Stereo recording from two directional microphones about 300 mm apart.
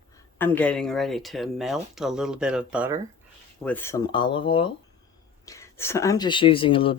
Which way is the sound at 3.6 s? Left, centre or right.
Centre.